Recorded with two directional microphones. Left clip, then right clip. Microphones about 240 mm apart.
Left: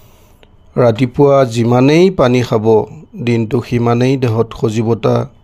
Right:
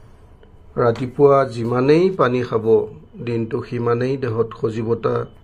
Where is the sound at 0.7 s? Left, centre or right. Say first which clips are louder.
Left 6 dB; left.